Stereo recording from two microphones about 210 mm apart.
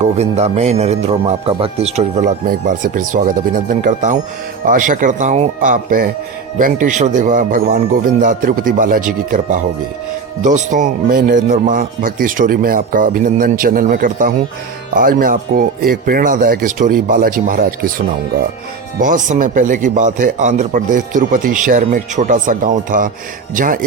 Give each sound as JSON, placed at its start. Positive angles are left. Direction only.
{"t": 0.0, "sound": "speech", "side_deg": -30}
{"t": 18.9, "sound": "speech", "side_deg": -40}